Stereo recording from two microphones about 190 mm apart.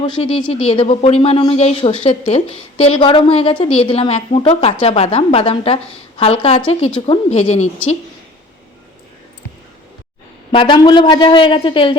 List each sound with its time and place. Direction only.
0.0 s speech: 30° left (ahead or behind)
10.5 s a woman's voice: 25° left (ahead or behind)